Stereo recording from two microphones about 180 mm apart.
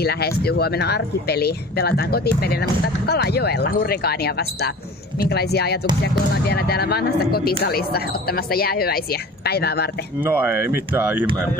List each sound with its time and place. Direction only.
0.0 s speech: 60° left (ahead or behind)
10.2 s speech: 10° right (ahead or behind)